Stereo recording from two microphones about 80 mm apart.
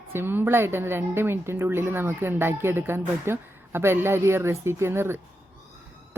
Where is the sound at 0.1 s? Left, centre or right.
Right.